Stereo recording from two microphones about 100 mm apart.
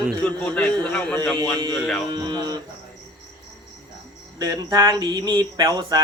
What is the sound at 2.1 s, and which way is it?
Speech, 45° right (ahead or behind).